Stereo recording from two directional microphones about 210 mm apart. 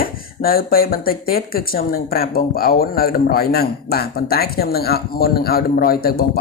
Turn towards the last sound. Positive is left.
turn(degrees=45)  # may be behind; listen again after turning